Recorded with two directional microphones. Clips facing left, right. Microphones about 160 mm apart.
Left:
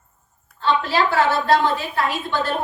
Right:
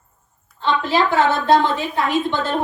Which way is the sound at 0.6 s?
20° right (ahead or behind).